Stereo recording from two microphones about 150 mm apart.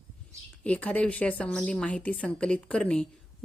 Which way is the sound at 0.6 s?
10° left (ahead or behind).